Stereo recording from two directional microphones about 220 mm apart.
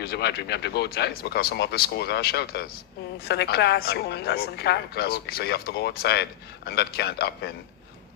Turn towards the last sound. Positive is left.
turn(degrees=45)  # may be behind; listen again after turning